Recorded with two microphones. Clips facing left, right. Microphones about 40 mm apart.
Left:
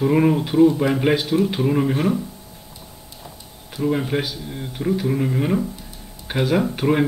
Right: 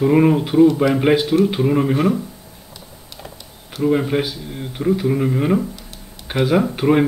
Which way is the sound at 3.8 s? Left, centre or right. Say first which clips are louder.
Right 4 dB; centre.